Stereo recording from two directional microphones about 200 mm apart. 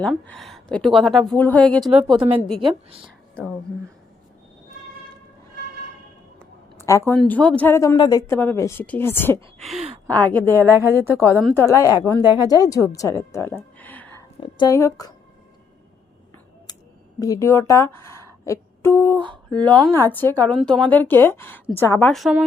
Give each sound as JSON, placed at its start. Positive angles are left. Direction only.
{"t": 0.0, "sound": "speech", "side_deg": 5}
{"t": 2.6, "sound": "a woman's voice", "side_deg": -25}
{"t": 6.4, "sound": "a sound", "side_deg": 15}
{"t": 7.1, "sound": "a woman's voice", "side_deg": 10}
{"t": 10.3, "sound": "speech", "side_deg": -15}
{"t": 11.5, "sound": "a woman's voice", "side_deg": 15}
{"t": 17.2, "sound": "a woman's voice", "side_deg": 15}
{"t": 19.5, "sound": "a woman's voice", "side_deg": -20}
{"t": 20.0, "sound": "a woman's voice", "side_deg": 10}